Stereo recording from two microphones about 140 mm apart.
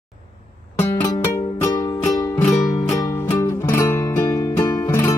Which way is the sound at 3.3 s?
20° left (ahead or behind).